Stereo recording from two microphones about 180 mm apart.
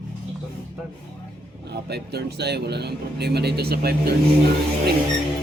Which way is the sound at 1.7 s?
65° right (ahead or behind).